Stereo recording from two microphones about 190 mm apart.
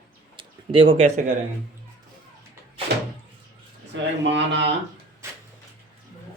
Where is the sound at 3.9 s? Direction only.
70° right (ahead or behind).